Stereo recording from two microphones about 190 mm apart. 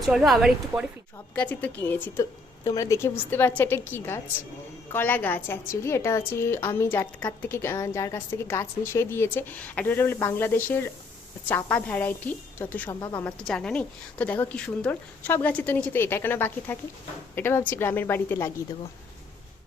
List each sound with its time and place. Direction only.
0.0 s a woman's voice: centre (ahead or behind)
1.4 s a woman's voice: 10° left (ahead or behind)
13.2 s a woman's voice: 5° left (ahead or behind)